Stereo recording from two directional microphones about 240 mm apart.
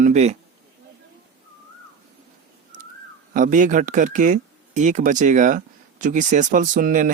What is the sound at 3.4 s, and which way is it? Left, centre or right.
Speech, right.